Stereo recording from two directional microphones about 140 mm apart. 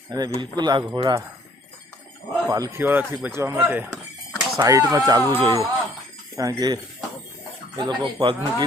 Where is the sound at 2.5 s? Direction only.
20° right (ahead or behind).